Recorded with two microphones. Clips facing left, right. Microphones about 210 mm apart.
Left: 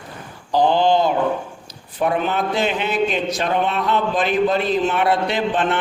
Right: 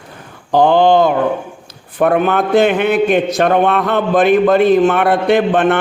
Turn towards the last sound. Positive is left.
turn(degrees=-60)  # may be behind; listen again after turning